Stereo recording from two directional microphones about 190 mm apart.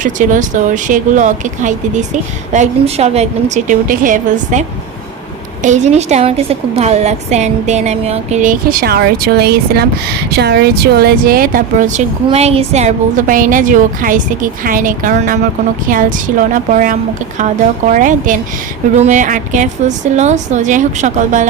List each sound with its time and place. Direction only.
0.0 s speech: 40° right (ahead or behind)
5.6 s a woman's voice: 40° right (ahead or behind)